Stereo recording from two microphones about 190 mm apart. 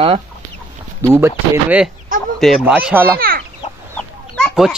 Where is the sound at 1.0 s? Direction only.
10° right (ahead or behind).